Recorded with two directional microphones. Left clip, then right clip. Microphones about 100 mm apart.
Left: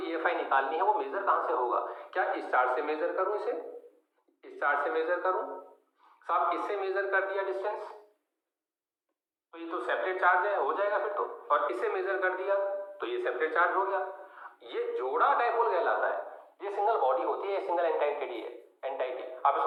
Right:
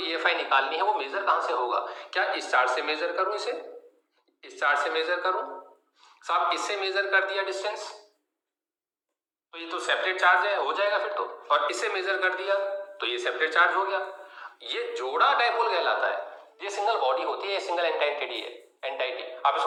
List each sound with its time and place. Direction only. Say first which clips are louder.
0.0 s a man's voice: right 4 dB; 15° right (ahead or behind)
4.4 s a man's voice: right 4 dB; 10° right (ahead or behind)
9.5 s a man's voice: right 4 dB; 15° right (ahead or behind)